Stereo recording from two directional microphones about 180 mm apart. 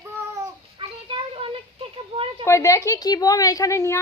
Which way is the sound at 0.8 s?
30° right (ahead or behind).